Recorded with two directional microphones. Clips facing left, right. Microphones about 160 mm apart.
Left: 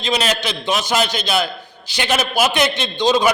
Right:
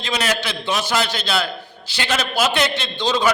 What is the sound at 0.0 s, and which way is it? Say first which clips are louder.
A man's voice: left 3 dB; 20° left (ahead or behind).